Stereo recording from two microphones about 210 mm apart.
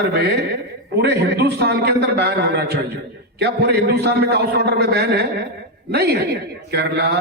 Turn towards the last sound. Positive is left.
turn(degrees=-50)  # may be behind; listen again after turning